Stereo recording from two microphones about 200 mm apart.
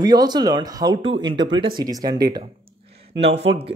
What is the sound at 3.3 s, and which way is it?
Speech, 60° right (ahead or behind).